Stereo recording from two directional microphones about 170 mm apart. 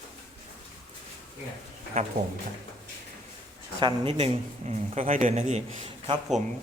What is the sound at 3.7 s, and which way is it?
Speech, 30° right (ahead or behind).